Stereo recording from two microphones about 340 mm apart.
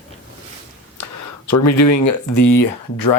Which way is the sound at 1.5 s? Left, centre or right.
Left.